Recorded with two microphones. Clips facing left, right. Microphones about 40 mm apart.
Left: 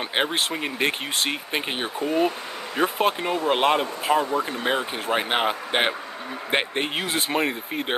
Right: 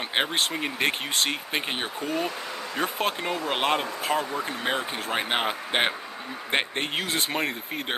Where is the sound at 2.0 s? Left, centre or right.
Left.